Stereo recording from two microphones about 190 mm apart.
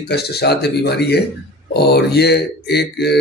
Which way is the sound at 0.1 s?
60° left (ahead or behind).